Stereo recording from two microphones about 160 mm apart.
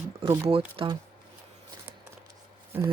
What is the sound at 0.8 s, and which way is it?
Speech, 35° right (ahead or behind).